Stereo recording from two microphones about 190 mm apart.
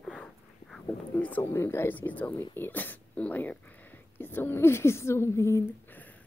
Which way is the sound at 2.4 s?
10° left (ahead or behind).